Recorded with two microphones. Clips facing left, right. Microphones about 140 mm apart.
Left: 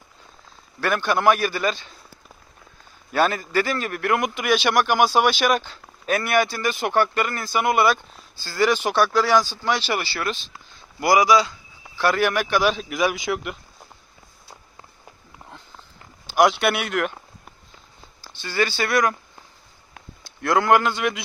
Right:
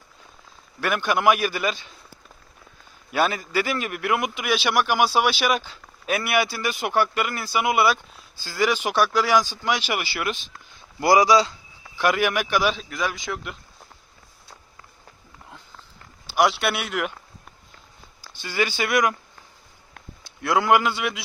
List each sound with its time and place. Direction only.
0.8 s a man's voice: 10° right (ahead or behind)
3.1 s a man's voice: 10° right (ahead or behind)
11.0 s a man's voice: 30° right (ahead or behind)
11.9 s a man's voice: 10° right (ahead or behind)
12.9 s speech: 15° left (ahead or behind)
16.2 s speech: centre (ahead or behind)
18.4 s a man's voice: 15° right (ahead or behind)
20.4 s a man's voice: 10° right (ahead or behind)